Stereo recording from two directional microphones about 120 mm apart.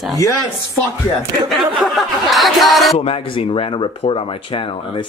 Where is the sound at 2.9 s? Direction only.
50° left (ahead or behind).